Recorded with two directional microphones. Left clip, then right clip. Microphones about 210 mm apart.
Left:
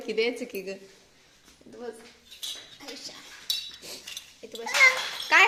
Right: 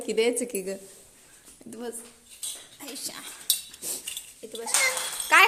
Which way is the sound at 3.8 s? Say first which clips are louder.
Right 3 dB; 15° right (ahead or behind).